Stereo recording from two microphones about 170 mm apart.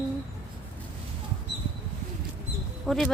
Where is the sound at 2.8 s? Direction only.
Centre (ahead or behind).